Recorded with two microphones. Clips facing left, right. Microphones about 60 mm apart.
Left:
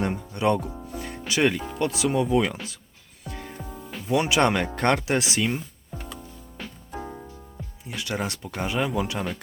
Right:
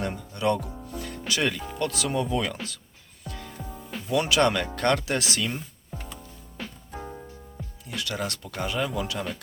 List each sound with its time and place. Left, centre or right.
0.0 s music: left
1.3 s speech: left
3.2 s music: left
4.1 s speech: centre
6.6 s music: centre
7.9 s speech: left